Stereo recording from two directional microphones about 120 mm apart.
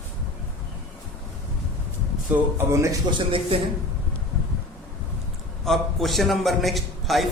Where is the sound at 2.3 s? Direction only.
20° right (ahead or behind).